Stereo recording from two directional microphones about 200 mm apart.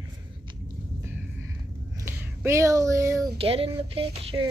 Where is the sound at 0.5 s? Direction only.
20° right (ahead or behind).